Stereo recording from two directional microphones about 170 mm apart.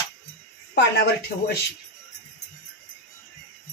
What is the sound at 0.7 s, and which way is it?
Speech, 80° left.